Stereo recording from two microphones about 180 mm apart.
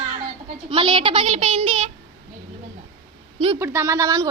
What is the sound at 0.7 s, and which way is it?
A woman's voice, 30° right (ahead or behind).